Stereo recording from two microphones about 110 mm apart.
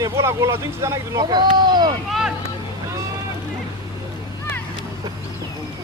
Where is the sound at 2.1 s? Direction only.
5° right (ahead or behind).